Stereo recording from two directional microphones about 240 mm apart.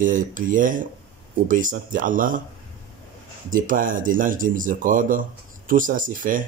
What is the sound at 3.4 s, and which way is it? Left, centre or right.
Speech, right.